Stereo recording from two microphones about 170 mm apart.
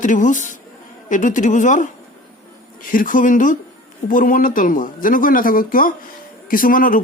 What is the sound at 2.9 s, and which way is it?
A man's voice, 50° left (ahead or behind).